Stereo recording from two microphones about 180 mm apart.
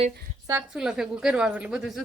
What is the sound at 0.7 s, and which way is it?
A woman's voice, 5° right (ahead or behind).